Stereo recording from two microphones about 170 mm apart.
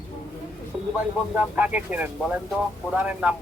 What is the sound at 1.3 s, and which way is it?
Speech, 10° right (ahead or behind).